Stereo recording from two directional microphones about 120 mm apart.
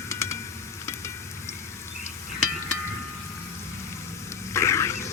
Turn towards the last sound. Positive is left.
turn(degrees=25)  # may be behind; listen again after turning